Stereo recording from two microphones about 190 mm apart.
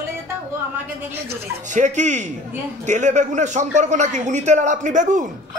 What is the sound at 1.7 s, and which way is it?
A man's voice, 40° right (ahead or behind).